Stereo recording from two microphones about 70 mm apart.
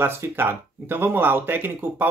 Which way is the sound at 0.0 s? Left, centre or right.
Right.